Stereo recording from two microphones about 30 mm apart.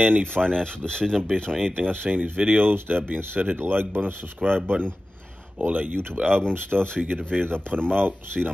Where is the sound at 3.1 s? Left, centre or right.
Right.